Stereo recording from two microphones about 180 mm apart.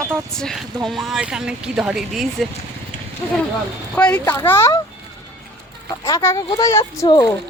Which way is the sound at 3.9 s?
5° left (ahead or behind).